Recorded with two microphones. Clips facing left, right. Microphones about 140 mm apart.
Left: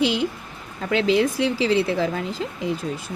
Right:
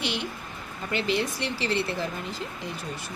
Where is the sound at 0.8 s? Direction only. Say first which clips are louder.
Left 8 dB; 90° left.